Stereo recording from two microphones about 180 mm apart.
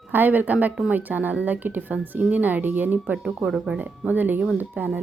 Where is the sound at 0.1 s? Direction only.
10° right (ahead or behind).